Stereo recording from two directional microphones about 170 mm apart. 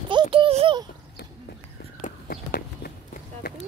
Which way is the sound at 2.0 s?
60° left (ahead or behind).